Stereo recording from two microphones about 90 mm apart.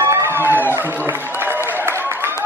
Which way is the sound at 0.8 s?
25° right (ahead or behind).